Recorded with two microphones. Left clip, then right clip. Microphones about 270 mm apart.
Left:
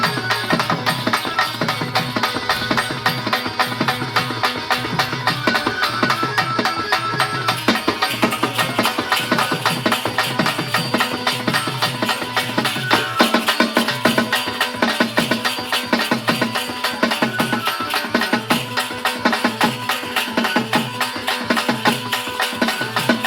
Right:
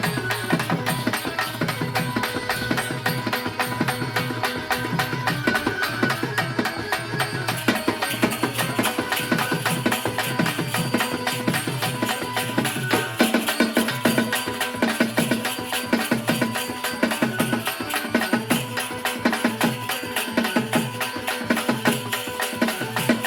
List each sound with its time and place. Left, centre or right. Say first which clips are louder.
0.0 s music: left 6 dB; centre